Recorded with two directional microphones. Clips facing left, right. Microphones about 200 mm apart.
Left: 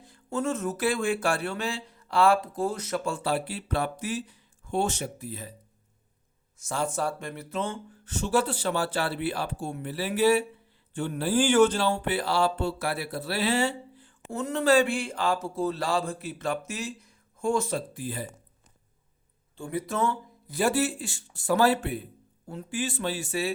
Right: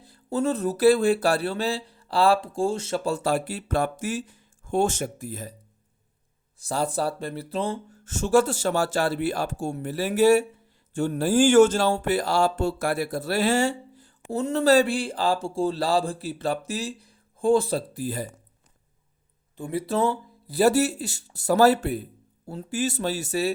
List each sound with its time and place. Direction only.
0.0 s speech: 35° right (ahead or behind)
6.6 s speech: 35° right (ahead or behind)
14.3 s speech: 35° right (ahead or behind)
19.5 s speech: 25° right (ahead or behind); by 23.5 s 40° right (ahead or behind)